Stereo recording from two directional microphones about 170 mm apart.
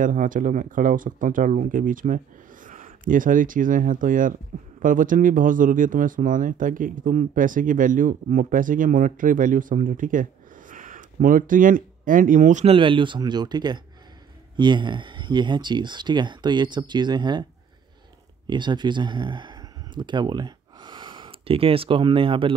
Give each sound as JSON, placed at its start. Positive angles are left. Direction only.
{"t": 0.0, "sound": "speech", "side_deg": -50}
{"t": 12.6, "sound": "speech", "side_deg": -30}
{"t": 18.5, "sound": "speech", "side_deg": -25}